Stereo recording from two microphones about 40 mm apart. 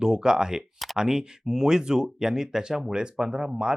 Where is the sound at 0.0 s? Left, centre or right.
Right.